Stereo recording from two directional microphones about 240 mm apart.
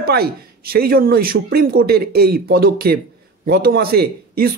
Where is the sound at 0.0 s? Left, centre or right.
Right.